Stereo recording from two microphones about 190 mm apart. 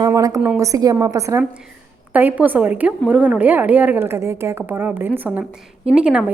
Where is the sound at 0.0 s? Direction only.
20° right (ahead or behind).